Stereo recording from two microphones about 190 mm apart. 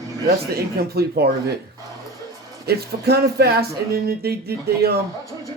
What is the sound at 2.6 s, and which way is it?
Speech, 55° right (ahead or behind).